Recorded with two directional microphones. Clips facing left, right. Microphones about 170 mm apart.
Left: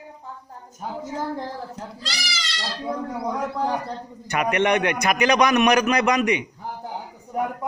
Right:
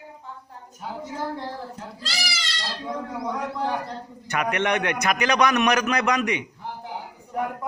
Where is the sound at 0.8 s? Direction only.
45° left (ahead or behind).